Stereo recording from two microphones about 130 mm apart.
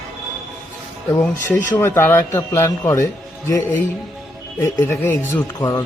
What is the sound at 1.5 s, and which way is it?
Speech, 15° left (ahead or behind).